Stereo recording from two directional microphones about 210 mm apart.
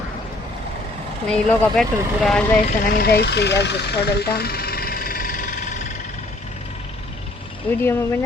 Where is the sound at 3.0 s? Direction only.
50° left (ahead or behind).